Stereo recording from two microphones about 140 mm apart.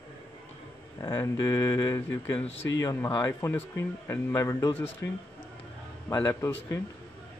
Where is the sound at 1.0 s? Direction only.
20° left (ahead or behind).